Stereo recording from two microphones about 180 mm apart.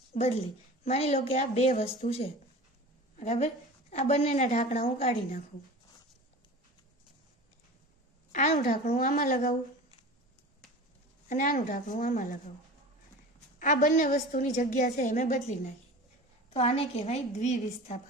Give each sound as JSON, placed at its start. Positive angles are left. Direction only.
{"t": 0.1, "sound": "a woman's voice", "side_deg": 35}
{"t": 8.3, "sound": "a woman's voice", "side_deg": 45}
{"t": 11.3, "sound": "a woman's voice", "side_deg": 45}
{"t": 13.6, "sound": "a woman's voice", "side_deg": 45}